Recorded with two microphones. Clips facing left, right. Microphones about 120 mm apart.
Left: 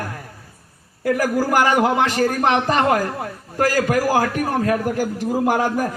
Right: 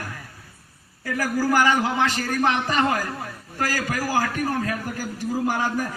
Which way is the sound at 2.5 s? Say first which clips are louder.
Left 5 dB; 50° left (ahead or behind).